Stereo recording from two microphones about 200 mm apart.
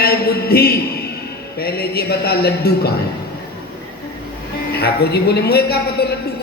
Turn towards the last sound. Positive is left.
turn(degrees=55)  # may be behind; listen again after turning